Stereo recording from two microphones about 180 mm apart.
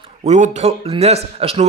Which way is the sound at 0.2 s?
40° right (ahead or behind).